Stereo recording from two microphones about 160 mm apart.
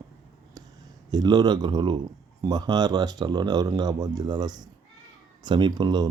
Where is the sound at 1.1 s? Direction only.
25° right (ahead or behind).